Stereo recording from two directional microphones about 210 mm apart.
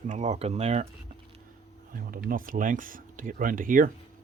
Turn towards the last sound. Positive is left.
turn(degrees=-40)  # may be behind; listen again after turning